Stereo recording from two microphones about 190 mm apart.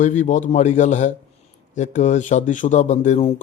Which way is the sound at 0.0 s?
40° left (ahead or behind).